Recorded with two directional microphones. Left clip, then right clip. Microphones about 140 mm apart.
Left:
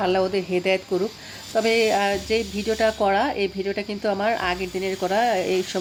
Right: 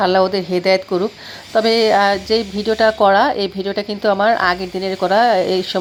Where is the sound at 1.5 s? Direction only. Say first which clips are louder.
Right 6 dB; 20° right (ahead or behind).